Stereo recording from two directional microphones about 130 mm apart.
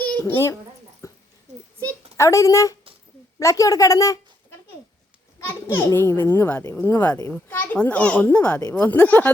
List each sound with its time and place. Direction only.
0.0 s a child's voice: 15° left (ahead or behind)
1.0 s dog: 25° left (ahead or behind)
1.5 s a sound: 65° right (ahead or behind)
2.1 s a woman's voice: 25° left (ahead or behind)
5.7 s a child's voice: 20° left (ahead or behind)